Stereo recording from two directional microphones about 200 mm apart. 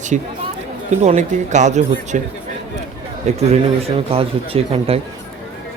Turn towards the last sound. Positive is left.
turn(degrees=-30)  # may be behind; listen again after turning